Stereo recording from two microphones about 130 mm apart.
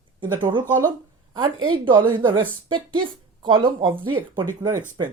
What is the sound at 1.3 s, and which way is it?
Speech, 40° right (ahead or behind).